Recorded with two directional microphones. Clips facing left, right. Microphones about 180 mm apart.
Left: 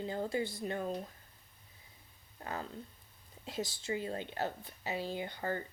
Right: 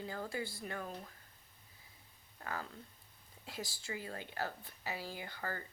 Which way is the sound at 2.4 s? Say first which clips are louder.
Left 3 dB; 25° left (ahead or behind).